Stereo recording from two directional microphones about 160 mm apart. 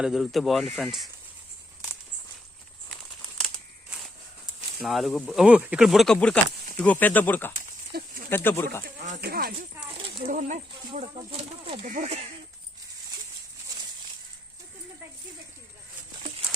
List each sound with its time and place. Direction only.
0.0 s speech: centre (ahead or behind)
3.3 s a sound: centre (ahead or behind)
4.8 s speech: centre (ahead or behind)
7.9 s speech: 80° right
8.3 s speech: 15° left (ahead or behind)
8.8 s speech: 55° right (ahead or behind)
9.2 s speech: 70° right (ahead or behind)
10.2 s speech: 60° right (ahead or behind); by 11.9 s 35° right (ahead or behind)
11.9 s speech: 50° right (ahead or behind)